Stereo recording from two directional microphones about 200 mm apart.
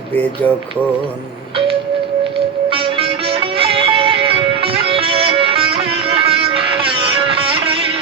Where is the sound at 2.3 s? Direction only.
25° right (ahead or behind).